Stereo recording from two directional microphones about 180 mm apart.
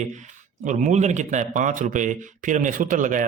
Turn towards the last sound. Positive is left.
turn(degrees=-45)  # may be behind; listen again after turning